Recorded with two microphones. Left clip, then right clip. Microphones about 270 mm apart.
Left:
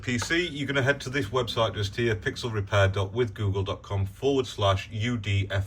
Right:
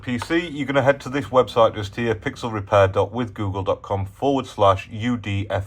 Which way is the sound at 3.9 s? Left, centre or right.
Right.